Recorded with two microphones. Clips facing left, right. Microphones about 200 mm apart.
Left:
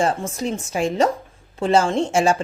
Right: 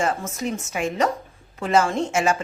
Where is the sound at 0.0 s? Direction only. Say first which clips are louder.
Left 3 dB; 30° left (ahead or behind).